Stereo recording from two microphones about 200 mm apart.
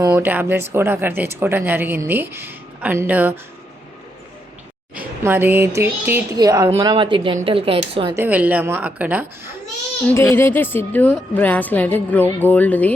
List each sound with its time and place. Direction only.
0.0 s speech: 15° right (ahead or behind)
4.9 s speech: 10° right (ahead or behind); by 8.1 s 25° right (ahead or behind)
8.1 s speech: 10° right (ahead or behind)
10.1 s a woman's voice: 15° left (ahead or behind)